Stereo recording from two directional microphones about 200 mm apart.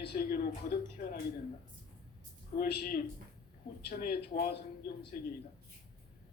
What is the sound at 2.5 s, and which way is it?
Speech, 45° left (ahead or behind).